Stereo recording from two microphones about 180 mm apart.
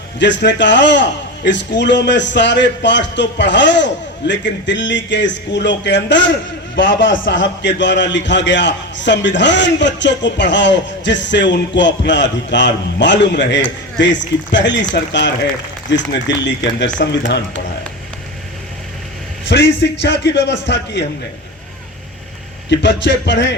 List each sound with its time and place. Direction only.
0.2 s a man's voice: 80° left
6.7 s a man's voice: 90° left; by 17.4 s 75° left (ahead or behind)
19.5 s a man's voice: 75° left (ahead or behind)
22.7 s a man's voice: 75° left (ahead or behind)